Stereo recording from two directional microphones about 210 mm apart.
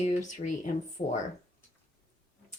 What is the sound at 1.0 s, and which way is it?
Speech, 25° left (ahead or behind).